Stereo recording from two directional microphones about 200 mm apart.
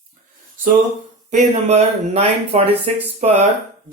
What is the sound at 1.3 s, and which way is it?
Speech, 35° right (ahead or behind).